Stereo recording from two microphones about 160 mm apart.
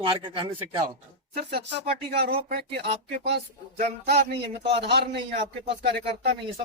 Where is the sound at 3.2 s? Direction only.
90° right.